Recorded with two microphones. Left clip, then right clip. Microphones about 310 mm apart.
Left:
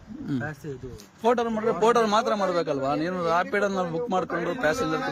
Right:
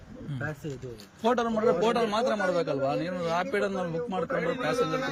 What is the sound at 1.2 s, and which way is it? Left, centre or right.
A man's voice, centre.